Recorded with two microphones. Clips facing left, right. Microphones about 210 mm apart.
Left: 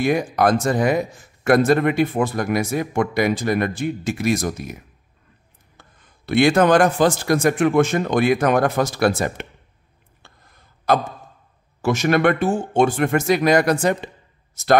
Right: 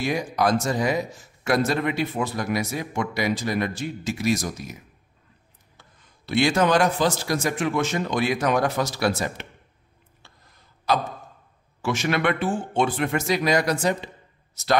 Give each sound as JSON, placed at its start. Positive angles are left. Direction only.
{"t": 0.0, "sound": "a man's voice", "side_deg": 55}
{"t": 5.8, "sound": "a man's voice", "side_deg": 55}
{"t": 10.2, "sound": "a sound", "side_deg": 50}
{"t": 11.8, "sound": "a man's voice", "side_deg": 45}